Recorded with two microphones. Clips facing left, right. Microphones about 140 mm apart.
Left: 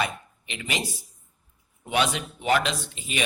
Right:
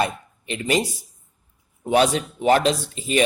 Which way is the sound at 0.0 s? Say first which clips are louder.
Right 5 dB; 40° right (ahead or behind).